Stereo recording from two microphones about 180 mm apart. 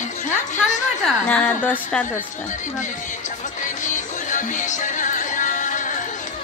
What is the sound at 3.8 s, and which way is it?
Music, 45° left (ahead or behind).